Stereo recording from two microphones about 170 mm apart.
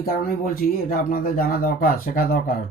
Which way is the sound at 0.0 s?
55° left (ahead or behind).